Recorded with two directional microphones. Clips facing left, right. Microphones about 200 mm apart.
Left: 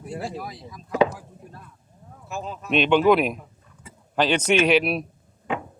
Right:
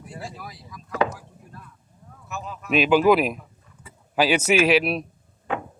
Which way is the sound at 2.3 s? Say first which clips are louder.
Left 3 dB; 25° left (ahead or behind).